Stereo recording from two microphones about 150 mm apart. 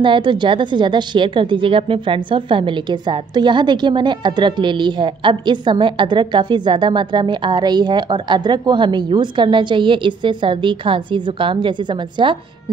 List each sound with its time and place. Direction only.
0.0 s a woman's voice: 35° right (ahead or behind)